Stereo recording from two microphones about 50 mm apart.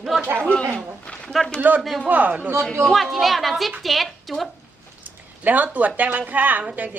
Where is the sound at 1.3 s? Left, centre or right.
Centre.